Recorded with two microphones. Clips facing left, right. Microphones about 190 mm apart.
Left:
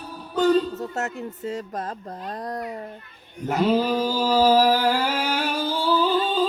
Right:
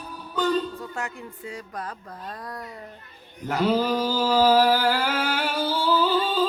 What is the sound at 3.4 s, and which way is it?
Mantra, 20° left (ahead or behind).